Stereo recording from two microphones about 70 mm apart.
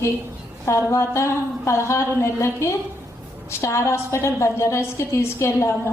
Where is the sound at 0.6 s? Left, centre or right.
Left.